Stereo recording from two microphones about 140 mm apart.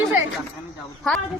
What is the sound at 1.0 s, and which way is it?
Speech, 5° left (ahead or behind).